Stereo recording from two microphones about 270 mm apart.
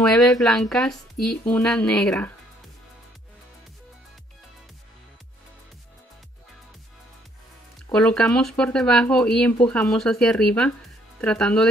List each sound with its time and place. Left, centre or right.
0.0 s speech: centre
7.9 s speech: centre